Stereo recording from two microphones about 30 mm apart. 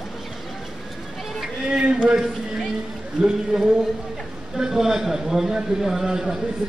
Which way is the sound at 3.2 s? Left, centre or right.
Right.